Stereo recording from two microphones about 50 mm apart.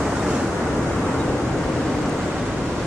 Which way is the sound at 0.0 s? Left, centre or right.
Centre.